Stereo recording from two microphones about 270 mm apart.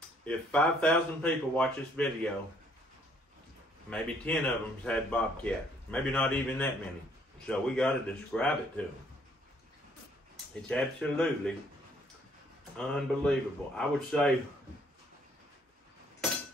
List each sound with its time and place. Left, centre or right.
0.2 s speech: centre
3.9 s speech: centre
10.7 s speech: centre
12.7 s speech: centre